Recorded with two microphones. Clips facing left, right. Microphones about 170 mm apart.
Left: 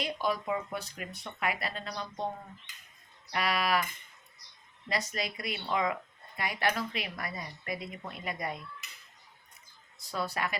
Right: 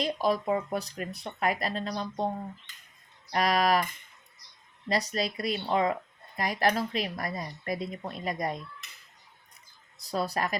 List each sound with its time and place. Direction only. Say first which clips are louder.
0.0 s speech: right 5 dB; 35° right (ahead or behind)
3.3 s speech: right 5 dB; 40° right (ahead or behind)
4.9 s speech: right 5 dB; 35° right (ahead or behind)
10.0 s speech: right 4 dB; 35° right (ahead or behind)